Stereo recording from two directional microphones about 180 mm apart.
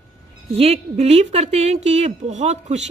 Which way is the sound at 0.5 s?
35° right (ahead or behind).